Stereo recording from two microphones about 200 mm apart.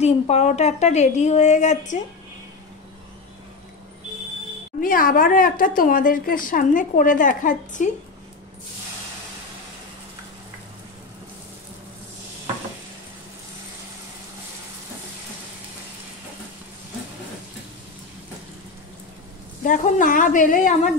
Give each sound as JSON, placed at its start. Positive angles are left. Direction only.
{"t": 0.0, "sound": "a woman's voice", "side_deg": 30}
{"t": 4.7, "sound": "a woman's voice", "side_deg": 45}
{"t": 19.6, "sound": "a woman's voice", "side_deg": 40}